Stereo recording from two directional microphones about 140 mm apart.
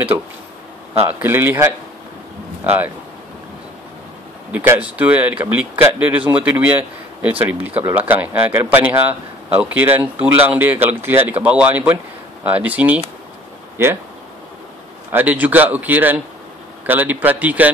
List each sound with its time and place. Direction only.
1.0 s speech: 15° right (ahead or behind)
4.5 s speech: 10° right (ahead or behind)
15.0 s speech: 15° right (ahead or behind)